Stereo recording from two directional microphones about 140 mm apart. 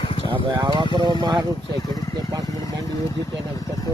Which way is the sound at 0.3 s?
35° right (ahead or behind).